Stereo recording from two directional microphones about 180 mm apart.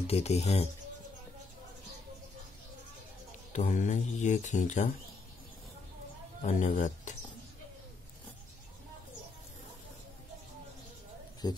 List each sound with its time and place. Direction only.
0.0 s speech: 35° left (ahead or behind)
3.5 s speech: 45° left (ahead or behind)
6.4 s speech: 45° left (ahead or behind)
11.4 s speech: 20° left (ahead or behind)